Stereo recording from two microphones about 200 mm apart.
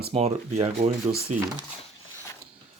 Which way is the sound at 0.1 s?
30° right (ahead or behind).